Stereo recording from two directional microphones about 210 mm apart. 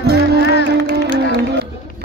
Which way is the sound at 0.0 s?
50° right (ahead or behind).